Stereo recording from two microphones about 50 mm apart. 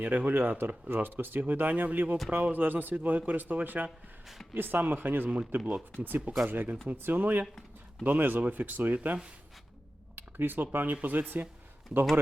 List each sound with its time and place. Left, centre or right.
0.0 s speech: right
5.5 s speech: right
7.4 s a sound: centre
8.0 s speech: right
10.2 s speech: right